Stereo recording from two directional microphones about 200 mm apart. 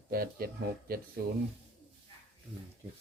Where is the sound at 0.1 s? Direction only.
50° right (ahead or behind).